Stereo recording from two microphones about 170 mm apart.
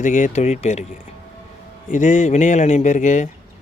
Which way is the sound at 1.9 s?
45° left (ahead or behind).